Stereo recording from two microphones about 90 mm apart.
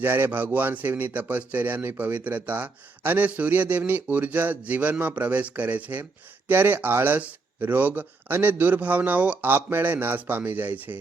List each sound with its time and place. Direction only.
0.0 s speech: 25° right (ahead or behind)